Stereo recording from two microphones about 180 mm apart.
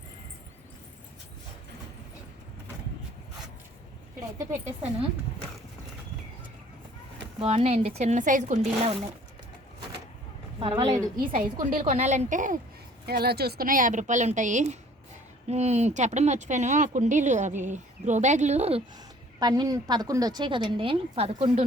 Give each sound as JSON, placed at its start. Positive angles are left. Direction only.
{"t": 7.4, "sound": "speech", "side_deg": -35}
{"t": 8.8, "sound": "speech", "side_deg": -30}
{"t": 10.6, "sound": "a woman's voice", "side_deg": -30}
{"t": 11.2, "sound": "a woman's voice", "side_deg": -50}
{"t": 11.8, "sound": "speech", "side_deg": -35}
{"t": 13.1, "sound": "a woman's voice", "side_deg": -60}
{"t": 19.4, "sound": "a woman's voice", "side_deg": -20}